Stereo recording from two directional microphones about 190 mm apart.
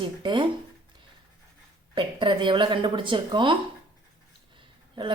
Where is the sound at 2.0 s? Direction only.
25° right (ahead or behind).